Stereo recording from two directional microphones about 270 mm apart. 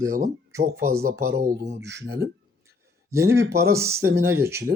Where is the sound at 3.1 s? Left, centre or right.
Centre.